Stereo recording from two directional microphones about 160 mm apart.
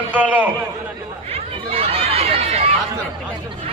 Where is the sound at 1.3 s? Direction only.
35° right (ahead or behind).